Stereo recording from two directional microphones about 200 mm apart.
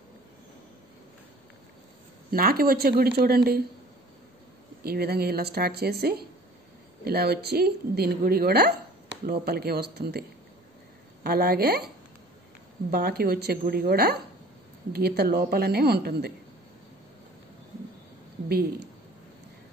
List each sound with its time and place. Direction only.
2.3 s speech: 45° right (ahead or behind)
4.8 s speech: 50° right (ahead or behind)
11.2 s speech: 50° right (ahead or behind)
12.9 s speech: 50° right (ahead or behind)